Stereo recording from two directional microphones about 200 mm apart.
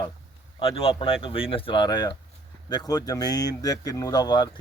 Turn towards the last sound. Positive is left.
turn(degrees=20)  # may be behind; listen again after turning